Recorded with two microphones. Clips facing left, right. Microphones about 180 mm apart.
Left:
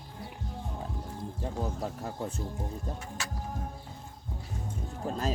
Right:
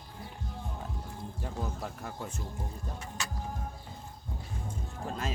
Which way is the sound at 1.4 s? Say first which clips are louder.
Left 4 dB; 25° left (ahead or behind).